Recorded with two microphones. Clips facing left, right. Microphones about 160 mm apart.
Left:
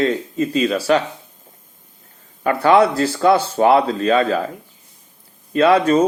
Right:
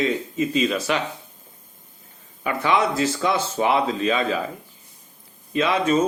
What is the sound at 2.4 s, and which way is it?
Speech, 45° left (ahead or behind).